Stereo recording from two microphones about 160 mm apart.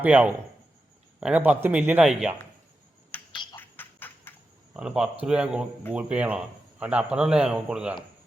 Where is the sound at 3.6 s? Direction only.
10° left (ahead or behind).